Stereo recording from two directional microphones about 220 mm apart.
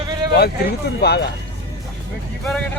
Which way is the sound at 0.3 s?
45° left (ahead or behind).